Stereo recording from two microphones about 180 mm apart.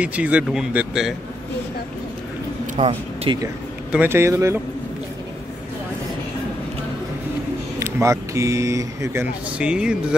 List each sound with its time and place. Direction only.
0.0 s speech: 5° right (ahead or behind)
2.8 s speech: 30° right (ahead or behind)
3.9 s speech: 10° right (ahead or behind)
7.8 s speech: 15° right (ahead or behind)